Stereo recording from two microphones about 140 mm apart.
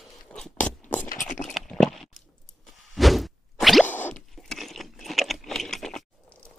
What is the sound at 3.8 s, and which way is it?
Scratch, 15° left (ahead or behind).